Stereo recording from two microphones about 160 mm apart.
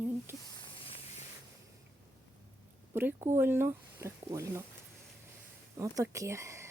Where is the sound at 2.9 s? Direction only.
15° right (ahead or behind).